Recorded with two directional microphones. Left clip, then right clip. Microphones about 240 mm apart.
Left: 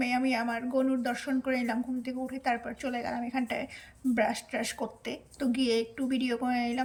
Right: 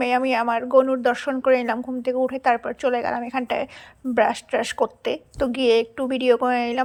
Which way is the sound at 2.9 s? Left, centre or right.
Right.